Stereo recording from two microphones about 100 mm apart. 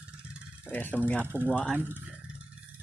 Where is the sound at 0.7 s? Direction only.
20° left (ahead or behind).